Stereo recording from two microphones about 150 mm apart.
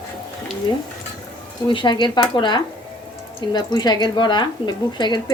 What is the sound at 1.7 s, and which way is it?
Speech, 30° left (ahead or behind).